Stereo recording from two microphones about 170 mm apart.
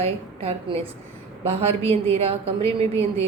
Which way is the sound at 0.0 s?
35° right (ahead or behind).